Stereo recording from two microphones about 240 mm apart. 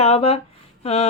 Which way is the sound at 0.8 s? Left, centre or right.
Left.